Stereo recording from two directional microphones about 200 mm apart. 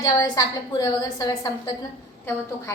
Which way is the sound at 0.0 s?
15° left (ahead or behind).